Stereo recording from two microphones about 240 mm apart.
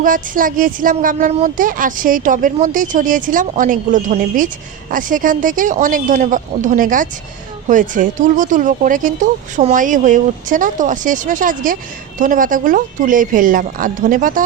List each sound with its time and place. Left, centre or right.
0.0 s speech: right